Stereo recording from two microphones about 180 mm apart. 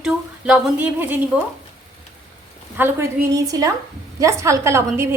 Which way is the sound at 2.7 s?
15° right (ahead or behind).